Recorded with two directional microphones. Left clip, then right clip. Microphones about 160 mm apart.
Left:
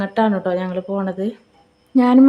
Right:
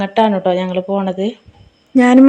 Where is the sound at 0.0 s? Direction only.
5° right (ahead or behind).